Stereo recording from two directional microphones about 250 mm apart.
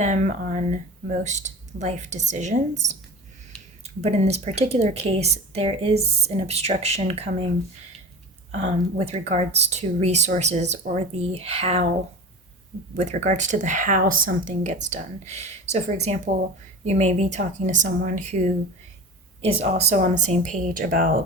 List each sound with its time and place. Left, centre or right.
0.0 s speech: right
3.8 s speech: right
8.5 s speech: right
13.0 s speech: right
19.4 s speech: right